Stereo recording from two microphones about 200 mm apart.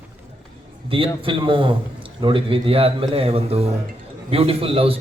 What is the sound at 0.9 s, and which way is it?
A man's voice, 25° right (ahead or behind).